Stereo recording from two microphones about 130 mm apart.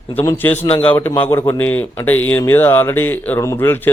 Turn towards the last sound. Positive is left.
turn(degrees=15)  # may be behind; listen again after turning